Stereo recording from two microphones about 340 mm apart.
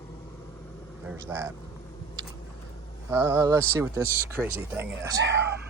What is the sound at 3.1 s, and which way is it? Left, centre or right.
Speech, centre.